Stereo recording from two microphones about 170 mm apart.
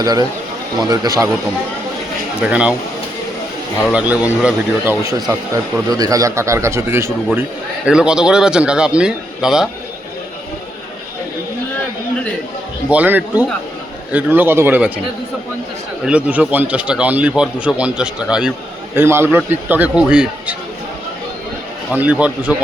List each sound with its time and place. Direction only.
0.0 s speech: 20° right (ahead or behind)
2.4 s a man's voice: 5° right (ahead or behind)
3.8 s a man's voice: 5° right (ahead or behind)
7.9 s a man's voice: 5° right (ahead or behind)
12.9 s a man's voice: 10° right (ahead or behind)
16.0 s a man's voice: 5° right (ahead or behind)
21.9 s a man's voice: 10° right (ahead or behind)